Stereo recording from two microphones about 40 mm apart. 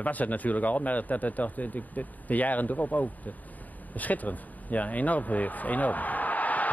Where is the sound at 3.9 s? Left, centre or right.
Left.